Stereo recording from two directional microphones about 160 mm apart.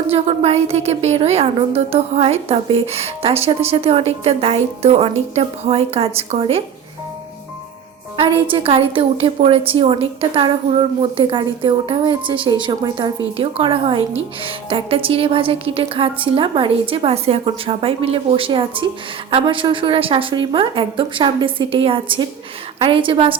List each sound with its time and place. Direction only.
0.1 s a woman's voice: 40° right (ahead or behind)
8.4 s a woman's voice: 35° right (ahead or behind)